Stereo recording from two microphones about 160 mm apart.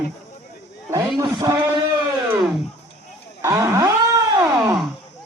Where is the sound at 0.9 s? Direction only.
25° right (ahead or behind).